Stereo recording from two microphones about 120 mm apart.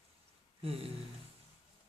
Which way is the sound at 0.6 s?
55° right (ahead or behind).